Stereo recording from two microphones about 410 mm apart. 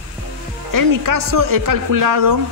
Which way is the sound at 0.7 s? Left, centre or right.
Right.